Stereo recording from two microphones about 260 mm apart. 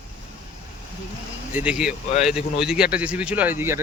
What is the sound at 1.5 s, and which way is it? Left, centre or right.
Speech, centre.